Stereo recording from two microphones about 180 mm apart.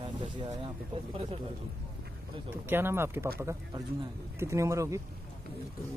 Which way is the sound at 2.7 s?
15° right (ahead or behind).